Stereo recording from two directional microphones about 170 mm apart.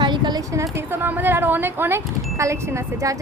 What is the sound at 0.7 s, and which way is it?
Speech, 10° right (ahead or behind).